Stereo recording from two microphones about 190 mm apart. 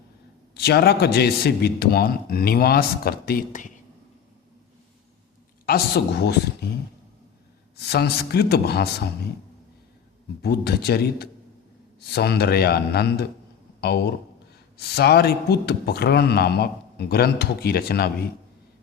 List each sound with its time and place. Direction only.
0.5 s speech: 55° left (ahead or behind)
5.6 s speech: 55° left (ahead or behind)
7.8 s speech: 60° left (ahead or behind)
10.4 s speech: 55° left (ahead or behind)